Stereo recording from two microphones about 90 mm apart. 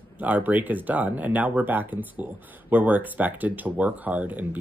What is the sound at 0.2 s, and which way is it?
Speech, 20° right (ahead or behind).